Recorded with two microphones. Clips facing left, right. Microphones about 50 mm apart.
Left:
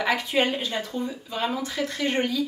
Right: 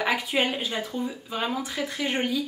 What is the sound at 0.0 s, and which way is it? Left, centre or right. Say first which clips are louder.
A woman's voice: left 2 dB; centre.